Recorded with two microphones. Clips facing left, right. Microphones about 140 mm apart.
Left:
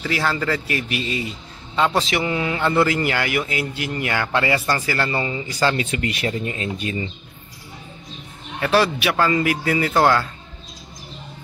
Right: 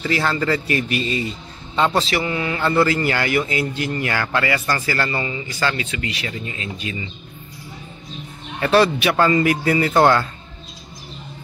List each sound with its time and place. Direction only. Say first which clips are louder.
0.1 s a man's voice: right 2 dB; 5° left (ahead or behind)
2.0 s a man's voice: even; 20° left (ahead or behind)
5.2 s speech: left 2 dB; 30° left (ahead or behind)
8.5 s a man's voice: right 3 dB; 5° left (ahead or behind)